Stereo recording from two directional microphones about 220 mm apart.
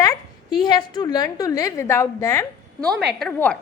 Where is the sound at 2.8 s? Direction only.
Centre (ahead or behind).